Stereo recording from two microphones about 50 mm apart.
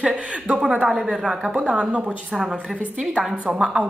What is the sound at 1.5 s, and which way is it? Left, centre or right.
Speech, right.